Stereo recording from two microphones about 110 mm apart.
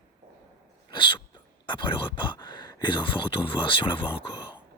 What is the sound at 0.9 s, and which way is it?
Speech, 45° left (ahead or behind).